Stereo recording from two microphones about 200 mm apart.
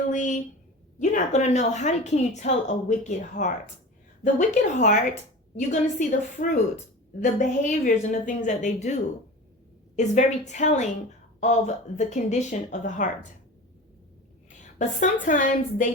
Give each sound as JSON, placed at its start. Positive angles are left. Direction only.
{"t": 0.1, "sound": "a woman's voice", "side_deg": 40}
{"t": 14.8, "sound": "a woman's voice", "side_deg": 40}